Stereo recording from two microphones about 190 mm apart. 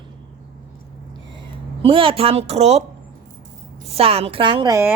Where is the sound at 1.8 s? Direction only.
30° right (ahead or behind).